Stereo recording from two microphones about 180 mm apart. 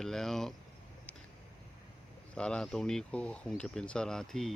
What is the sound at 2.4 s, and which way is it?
Fowl, 5° left (ahead or behind).